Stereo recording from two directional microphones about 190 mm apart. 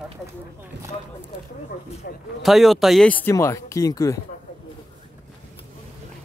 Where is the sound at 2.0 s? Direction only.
60° left (ahead or behind).